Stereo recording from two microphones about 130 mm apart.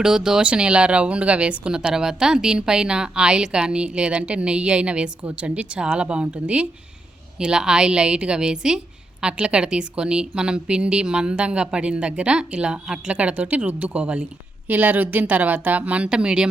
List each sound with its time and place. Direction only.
0.0 s speech: 5° right (ahead or behind)